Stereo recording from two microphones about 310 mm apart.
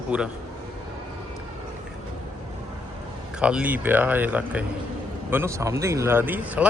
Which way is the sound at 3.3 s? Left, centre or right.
Centre.